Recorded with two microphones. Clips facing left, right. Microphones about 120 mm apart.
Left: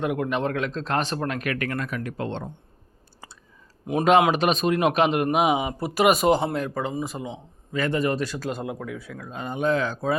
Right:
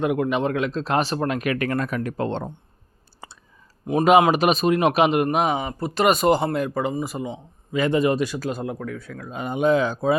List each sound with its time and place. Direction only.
0.0 s speech: 5° right (ahead or behind); by 1.8 s 25° right (ahead or behind)
1.8 s speech: 40° right (ahead or behind)
3.8 s a man's voice: 5° left (ahead or behind)
4.3 s a man's voice: 5° right (ahead or behind)
7.7 s speech: 20° right (ahead or behind)
8.4 s a man's voice: centre (ahead or behind); by 10.2 s 15° right (ahead or behind)